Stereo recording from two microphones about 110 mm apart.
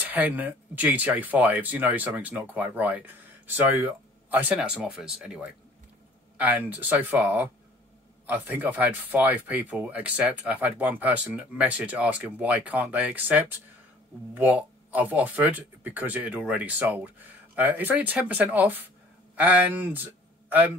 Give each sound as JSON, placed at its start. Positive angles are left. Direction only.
{"t": 0.0, "sound": "speech", "side_deg": -15}